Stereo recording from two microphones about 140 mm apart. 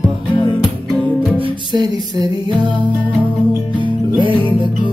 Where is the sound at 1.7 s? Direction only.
35° right (ahead or behind).